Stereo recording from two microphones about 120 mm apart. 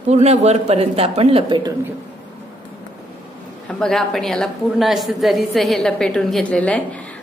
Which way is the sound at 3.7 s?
5° left (ahead or behind).